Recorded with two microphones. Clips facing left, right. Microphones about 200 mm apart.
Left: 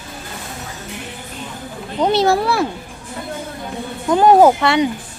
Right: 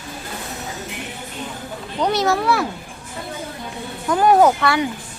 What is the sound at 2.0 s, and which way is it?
Speech, 30° left (ahead or behind).